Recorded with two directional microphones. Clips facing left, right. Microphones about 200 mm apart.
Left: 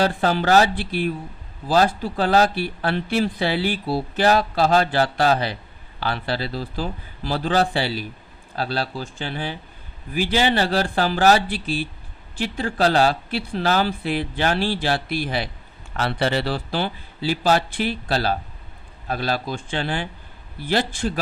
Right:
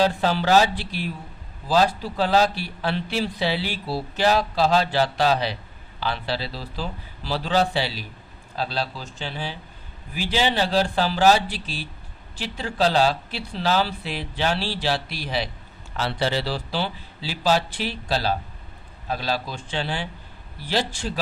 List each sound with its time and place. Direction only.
0.2 s speech: 50° left (ahead or behind)